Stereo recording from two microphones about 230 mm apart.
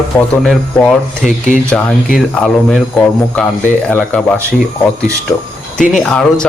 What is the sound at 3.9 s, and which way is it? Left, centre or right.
Speech, centre.